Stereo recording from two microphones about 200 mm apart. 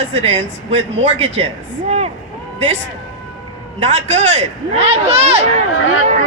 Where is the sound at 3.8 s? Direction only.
30° right (ahead or behind).